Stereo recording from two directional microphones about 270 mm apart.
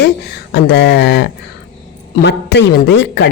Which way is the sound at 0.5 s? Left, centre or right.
Left.